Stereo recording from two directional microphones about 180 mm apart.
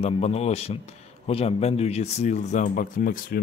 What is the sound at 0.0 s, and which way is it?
Speech, 35° left (ahead or behind).